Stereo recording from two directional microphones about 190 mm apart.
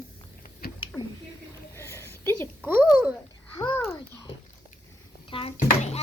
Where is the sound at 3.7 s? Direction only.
15° left (ahead or behind).